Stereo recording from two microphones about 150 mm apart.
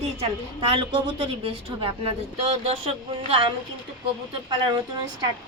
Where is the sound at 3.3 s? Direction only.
35° right (ahead or behind).